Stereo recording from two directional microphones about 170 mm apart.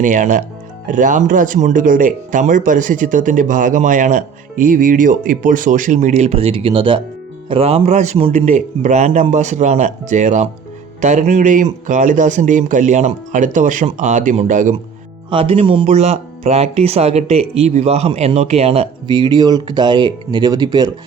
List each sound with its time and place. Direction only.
0.0 s speech: 50° right (ahead or behind)
15.3 s speech: 30° right (ahead or behind)